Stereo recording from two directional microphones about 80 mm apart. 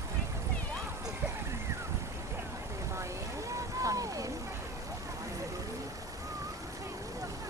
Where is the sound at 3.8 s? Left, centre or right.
Right.